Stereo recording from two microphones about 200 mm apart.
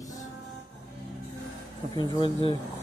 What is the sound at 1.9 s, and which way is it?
Speech, 20° left (ahead or behind).